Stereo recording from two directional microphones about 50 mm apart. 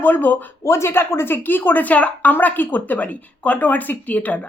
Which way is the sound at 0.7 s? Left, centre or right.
Left.